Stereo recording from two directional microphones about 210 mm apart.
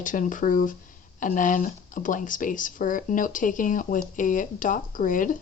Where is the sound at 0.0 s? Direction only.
40° left (ahead or behind).